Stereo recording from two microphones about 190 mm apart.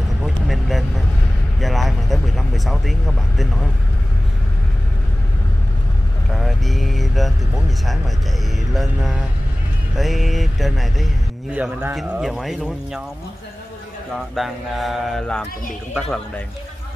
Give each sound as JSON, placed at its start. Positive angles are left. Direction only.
{"t": 0.2, "sound": "vehicle", "side_deg": 0}
{"t": 6.3, "sound": "speech", "side_deg": 0}
{"t": 14.3, "sound": "speech", "side_deg": 0}